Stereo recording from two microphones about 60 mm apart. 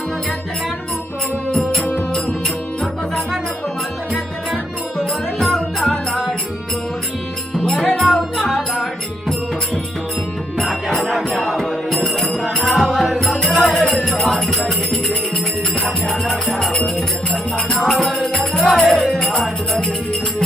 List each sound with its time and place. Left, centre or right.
1.8 s music: left
4.5 s music: centre
7.6 s music: centre
10.6 s music: centre
16.5 s music: centre
17.7 s music: centre